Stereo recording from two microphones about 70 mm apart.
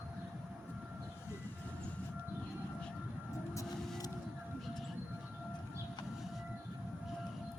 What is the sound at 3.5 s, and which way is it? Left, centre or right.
Vehicle, left.